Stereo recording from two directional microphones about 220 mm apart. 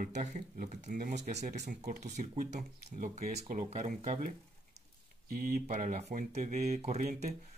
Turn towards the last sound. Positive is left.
turn(degrees=-35)  # may be behind; listen again after turning